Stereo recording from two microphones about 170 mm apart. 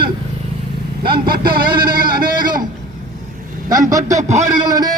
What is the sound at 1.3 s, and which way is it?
Vehicle, 60° right (ahead or behind).